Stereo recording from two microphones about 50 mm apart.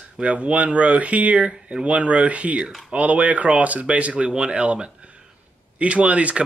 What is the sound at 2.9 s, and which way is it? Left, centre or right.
Speech, right.